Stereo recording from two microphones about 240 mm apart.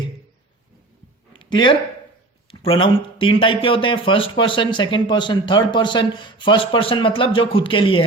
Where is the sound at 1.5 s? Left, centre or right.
Centre.